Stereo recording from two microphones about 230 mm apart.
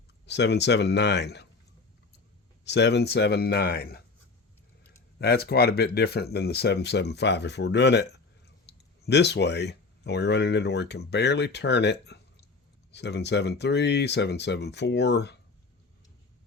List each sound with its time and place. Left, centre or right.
0.3 s speech: left
2.6 s speech: left
5.2 s speech: left